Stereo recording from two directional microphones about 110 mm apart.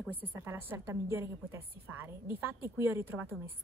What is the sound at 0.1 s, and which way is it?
A woman's voice, 15° right (ahead or behind).